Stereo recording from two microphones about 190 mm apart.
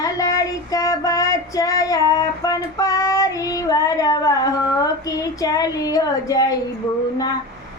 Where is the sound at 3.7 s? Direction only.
20° left (ahead or behind).